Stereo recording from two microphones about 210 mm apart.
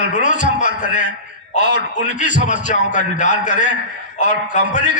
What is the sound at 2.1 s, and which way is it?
A man's voice, 35° left (ahead or behind).